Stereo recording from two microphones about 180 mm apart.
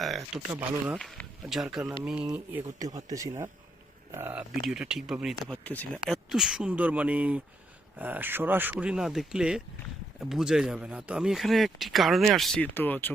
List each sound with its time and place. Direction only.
0.0 s speech: centre (ahead or behind)
6.2 s speech: 5° right (ahead or behind)